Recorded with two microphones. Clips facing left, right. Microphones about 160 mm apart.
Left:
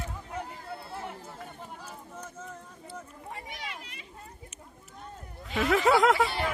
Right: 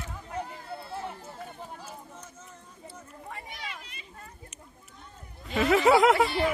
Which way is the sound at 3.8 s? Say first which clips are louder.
Left 1 dB; 70° left (ahead or behind).